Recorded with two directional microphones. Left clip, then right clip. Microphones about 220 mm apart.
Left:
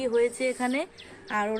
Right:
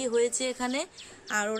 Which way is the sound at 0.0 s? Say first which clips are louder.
Left 2 dB; 10° right (ahead or behind).